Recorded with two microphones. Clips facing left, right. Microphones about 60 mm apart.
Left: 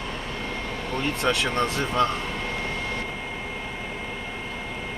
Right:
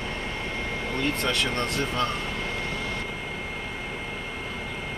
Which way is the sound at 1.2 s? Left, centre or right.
Centre.